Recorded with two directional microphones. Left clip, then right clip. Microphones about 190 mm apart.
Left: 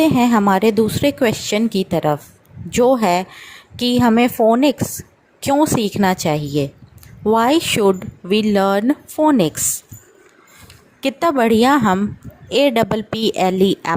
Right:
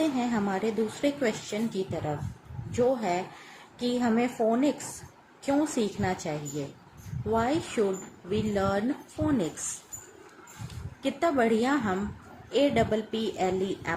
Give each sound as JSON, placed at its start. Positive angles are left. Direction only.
{"t": 0.0, "sound": "speech", "side_deg": 45}
{"t": 7.3, "sound": "speech", "side_deg": 50}
{"t": 11.0, "sound": "speech", "side_deg": 50}